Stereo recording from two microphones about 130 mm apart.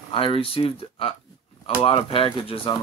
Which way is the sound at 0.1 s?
45° left (ahead or behind).